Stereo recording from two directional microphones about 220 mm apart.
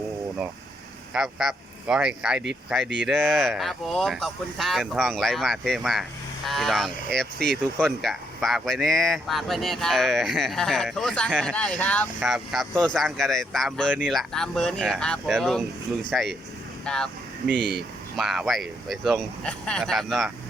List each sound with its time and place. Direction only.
1.1 s speech: centre (ahead or behind)
16.8 s vehicle: 5° left (ahead or behind)
17.5 s speech: 50° right (ahead or behind)
18.2 s speech: centre (ahead or behind)